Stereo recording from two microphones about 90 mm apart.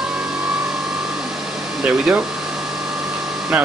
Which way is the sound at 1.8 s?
10° right (ahead or behind).